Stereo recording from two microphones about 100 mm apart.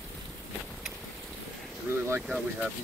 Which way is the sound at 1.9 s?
20° right (ahead or behind).